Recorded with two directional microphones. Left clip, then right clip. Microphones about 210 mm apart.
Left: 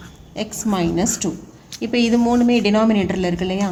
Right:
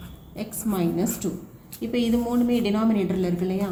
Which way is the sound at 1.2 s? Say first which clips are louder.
Left 5 dB; 55° left (ahead or behind).